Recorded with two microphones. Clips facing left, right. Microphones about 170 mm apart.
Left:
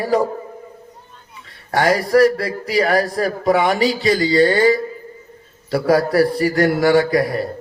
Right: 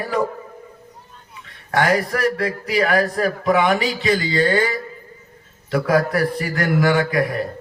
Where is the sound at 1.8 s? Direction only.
35° left (ahead or behind).